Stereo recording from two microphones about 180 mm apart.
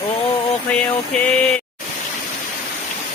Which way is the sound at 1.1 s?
5° left (ahead or behind).